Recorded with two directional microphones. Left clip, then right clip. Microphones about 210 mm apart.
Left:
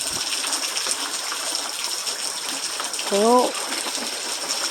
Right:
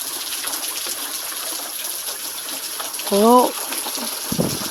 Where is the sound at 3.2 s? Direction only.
40° right (ahead or behind).